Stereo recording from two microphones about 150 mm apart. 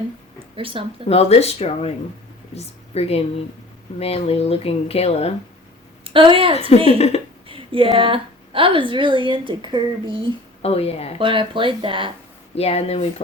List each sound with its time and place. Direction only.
0.3 s a sound: 35° right (ahead or behind)
1.0 s speech: 45° left (ahead or behind)
6.1 s a woman's voice: 35° right (ahead or behind)
6.7 s speech: 45° left (ahead or behind)
7.4 s a woman's voice: 35° right (ahead or behind)
10.6 s speech: 45° left (ahead or behind)
11.2 s a woman's voice: 35° right (ahead or behind)
12.5 s speech: 45° left (ahead or behind)